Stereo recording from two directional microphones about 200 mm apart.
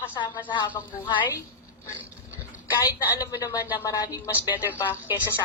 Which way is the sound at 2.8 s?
10° right (ahead or behind).